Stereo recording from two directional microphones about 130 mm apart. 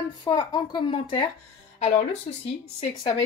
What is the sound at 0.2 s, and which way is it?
Speech, 35° left (ahead or behind).